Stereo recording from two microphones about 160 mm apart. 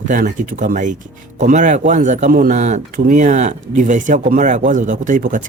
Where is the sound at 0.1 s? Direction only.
55° right (ahead or behind).